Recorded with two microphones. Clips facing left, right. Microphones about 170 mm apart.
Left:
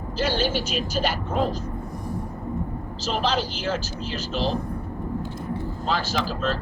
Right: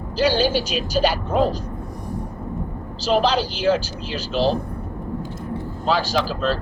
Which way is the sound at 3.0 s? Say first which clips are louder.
Right 6 dB; 35° right (ahead or behind).